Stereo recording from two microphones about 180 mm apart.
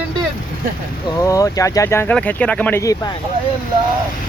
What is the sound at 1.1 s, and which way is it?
Speech, 20° left (ahead or behind).